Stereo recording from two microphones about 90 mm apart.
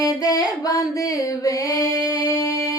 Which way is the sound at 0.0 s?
40° left (ahead or behind).